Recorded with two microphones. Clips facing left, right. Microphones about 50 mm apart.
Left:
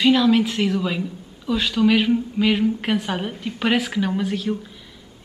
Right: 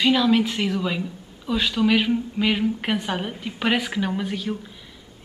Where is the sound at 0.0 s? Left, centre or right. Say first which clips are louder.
Left 2 dB; centre.